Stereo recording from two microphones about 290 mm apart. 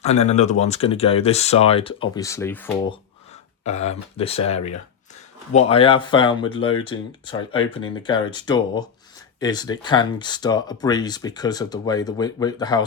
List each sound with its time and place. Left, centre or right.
0.0 s speech: left; by 2.7 s centre
3.6 s speech: left